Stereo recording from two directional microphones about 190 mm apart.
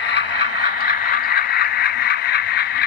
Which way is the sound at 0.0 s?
65° left (ahead or behind).